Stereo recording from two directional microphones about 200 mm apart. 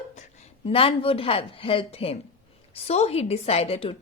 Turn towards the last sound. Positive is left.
turn(degrees=30)  # may be behind; listen again after turning